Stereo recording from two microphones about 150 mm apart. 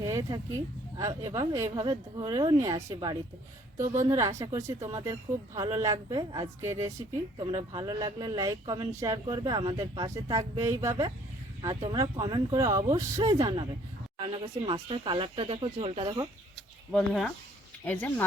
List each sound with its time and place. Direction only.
0.0 s a sound: 25° right (ahead or behind)
0.9 s speech: 25° right (ahead or behind)
7.3 s speech: 30° right (ahead or behind)
16.9 s speech: 5° left (ahead or behind)